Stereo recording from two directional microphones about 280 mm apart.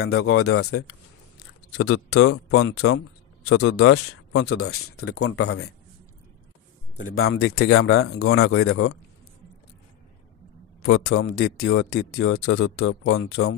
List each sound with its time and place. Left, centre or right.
0.0 s speech: left
7.2 s speech: left
11.1 s speech: left